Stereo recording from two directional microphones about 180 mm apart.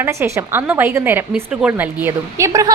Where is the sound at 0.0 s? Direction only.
15° right (ahead or behind).